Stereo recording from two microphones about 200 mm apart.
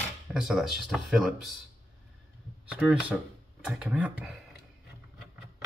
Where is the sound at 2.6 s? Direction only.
5° right (ahead or behind).